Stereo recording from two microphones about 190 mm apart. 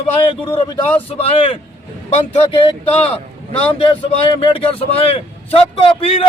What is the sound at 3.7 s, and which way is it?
Speech, 30° left (ahead or behind).